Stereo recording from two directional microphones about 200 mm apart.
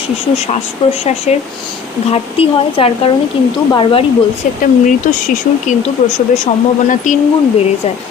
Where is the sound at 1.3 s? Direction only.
35° left (ahead or behind).